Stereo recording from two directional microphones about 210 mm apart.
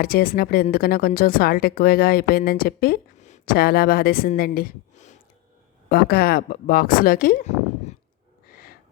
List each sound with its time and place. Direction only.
0.0 s a woman's voice: 45° left (ahead or behind)
8.4 s snort: 45° left (ahead or behind)